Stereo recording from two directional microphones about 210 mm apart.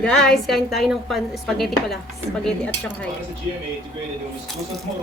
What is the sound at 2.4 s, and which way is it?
Dishes, 5° left (ahead or behind).